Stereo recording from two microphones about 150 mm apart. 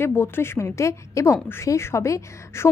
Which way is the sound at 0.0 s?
15° left (ahead or behind).